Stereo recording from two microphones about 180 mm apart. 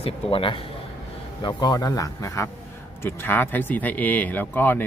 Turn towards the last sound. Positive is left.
turn(degrees=10)  # may be behind; listen again after turning